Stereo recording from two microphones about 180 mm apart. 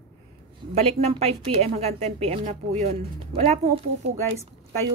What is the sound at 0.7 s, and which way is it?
A woman's voice, 35° right (ahead or behind).